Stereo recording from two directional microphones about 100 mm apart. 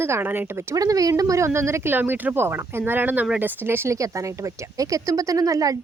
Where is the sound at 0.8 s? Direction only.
35° right (ahead or behind).